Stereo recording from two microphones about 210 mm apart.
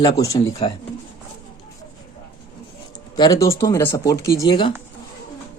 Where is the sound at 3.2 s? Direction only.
15° left (ahead or behind).